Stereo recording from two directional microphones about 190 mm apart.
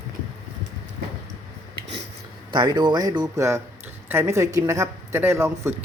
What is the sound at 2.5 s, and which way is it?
A man's voice, 20° right (ahead or behind).